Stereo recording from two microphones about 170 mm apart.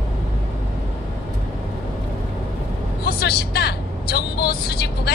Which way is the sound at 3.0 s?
70° left (ahead or behind).